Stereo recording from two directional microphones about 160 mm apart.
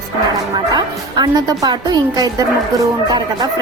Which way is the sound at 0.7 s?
25° right (ahead or behind).